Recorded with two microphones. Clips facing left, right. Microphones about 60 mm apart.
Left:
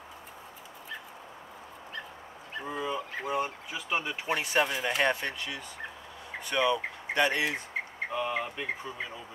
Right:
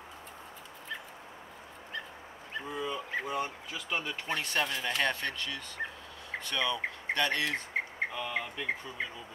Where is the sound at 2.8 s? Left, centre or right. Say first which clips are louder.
Left 1 dB; centre.